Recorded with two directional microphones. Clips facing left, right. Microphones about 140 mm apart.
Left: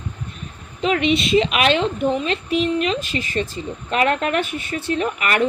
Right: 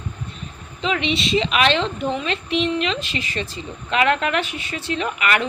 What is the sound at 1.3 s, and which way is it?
Speech, 30° right (ahead or behind).